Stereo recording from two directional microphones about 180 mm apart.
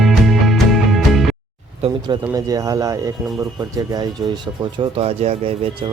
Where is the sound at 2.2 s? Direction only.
20° right (ahead or behind).